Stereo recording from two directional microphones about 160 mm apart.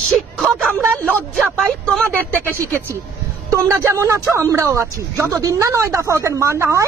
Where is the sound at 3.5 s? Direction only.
20° right (ahead or behind).